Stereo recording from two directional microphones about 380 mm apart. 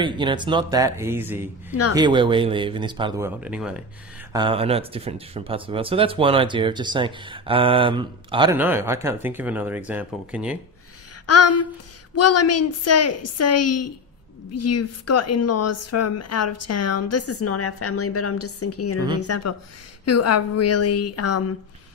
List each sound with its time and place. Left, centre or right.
0.0 s speech: centre
11.2 s speech: left